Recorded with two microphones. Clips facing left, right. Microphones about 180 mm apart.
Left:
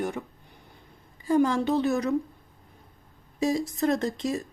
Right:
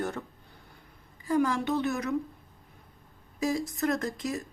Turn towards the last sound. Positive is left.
turn(degrees=30)  # may be behind; listen again after turning